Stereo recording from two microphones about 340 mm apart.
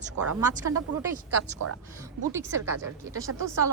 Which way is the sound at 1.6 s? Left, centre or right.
Right.